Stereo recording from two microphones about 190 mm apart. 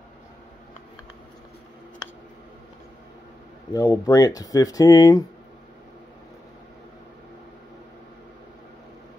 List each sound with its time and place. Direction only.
3.7 s speech: 20° left (ahead or behind)